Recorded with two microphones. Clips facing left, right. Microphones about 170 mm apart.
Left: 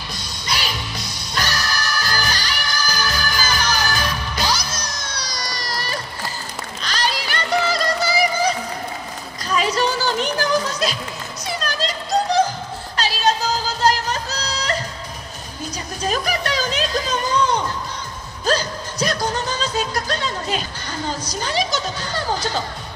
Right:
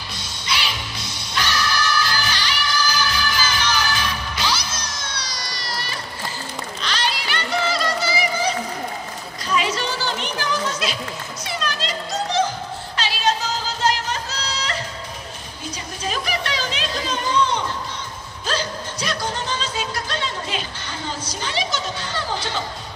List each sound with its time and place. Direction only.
0.1 s music: 40° left (ahead or behind)
6.8 s a sound: 40° left (ahead or behind)
9.5 s children playing: 40° left (ahead or behind)
12.9 s music: 40° left (ahead or behind)
16.0 s a sound: 40° left (ahead or behind)
18.4 s music: 40° left (ahead or behind)
21.3 s chatter: 40° left (ahead or behind)